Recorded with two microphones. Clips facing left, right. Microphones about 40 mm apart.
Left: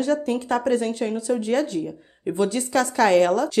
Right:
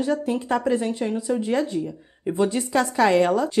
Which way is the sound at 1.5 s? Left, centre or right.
Centre.